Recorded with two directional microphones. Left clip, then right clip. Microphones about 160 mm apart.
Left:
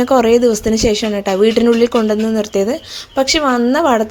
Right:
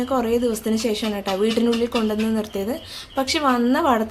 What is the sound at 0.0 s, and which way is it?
Speech, 55° left (ahead or behind).